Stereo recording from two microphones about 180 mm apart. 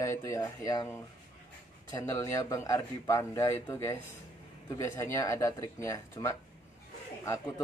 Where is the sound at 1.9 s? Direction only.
15° left (ahead or behind).